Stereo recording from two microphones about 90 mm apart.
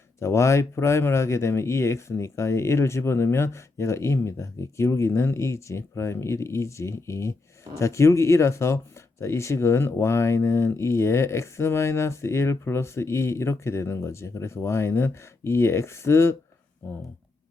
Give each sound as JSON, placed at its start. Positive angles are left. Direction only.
{"t": 0.2, "sound": "speech", "side_deg": 30}